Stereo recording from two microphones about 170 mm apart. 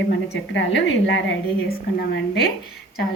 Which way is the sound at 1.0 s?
80° left.